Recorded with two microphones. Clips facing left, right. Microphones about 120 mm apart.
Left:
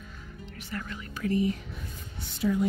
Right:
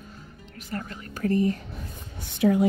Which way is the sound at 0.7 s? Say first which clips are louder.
Right 3 dB; 40° right (ahead or behind).